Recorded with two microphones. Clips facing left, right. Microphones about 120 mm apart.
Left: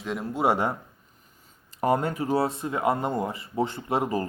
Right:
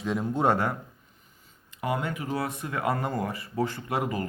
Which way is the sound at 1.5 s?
40° left (ahead or behind).